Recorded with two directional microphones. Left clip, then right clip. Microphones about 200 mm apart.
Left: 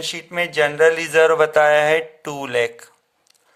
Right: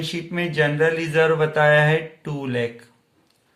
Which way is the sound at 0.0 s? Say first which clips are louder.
Left 3 dB; 40° left (ahead or behind).